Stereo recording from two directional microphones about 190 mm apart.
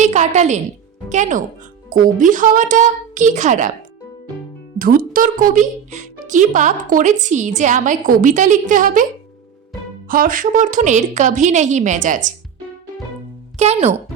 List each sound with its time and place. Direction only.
0.0 s a woman's voice: 40° right (ahead or behind)
4.8 s speech: 50° right (ahead or behind)
10.1 s a woman's voice: 45° right (ahead or behind)
13.6 s a woman's voice: 35° right (ahead or behind)